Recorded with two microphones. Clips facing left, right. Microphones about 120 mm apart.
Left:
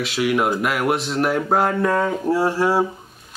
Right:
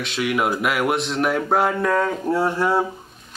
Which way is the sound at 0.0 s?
5° left (ahead or behind).